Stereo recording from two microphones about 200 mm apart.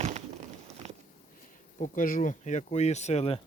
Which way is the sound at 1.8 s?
40° left (ahead or behind).